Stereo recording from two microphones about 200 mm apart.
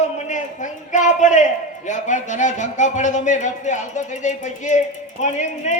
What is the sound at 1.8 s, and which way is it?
Speech, 40° left (ahead or behind).